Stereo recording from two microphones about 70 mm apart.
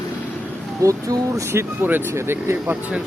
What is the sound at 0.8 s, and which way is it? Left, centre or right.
Speech, right.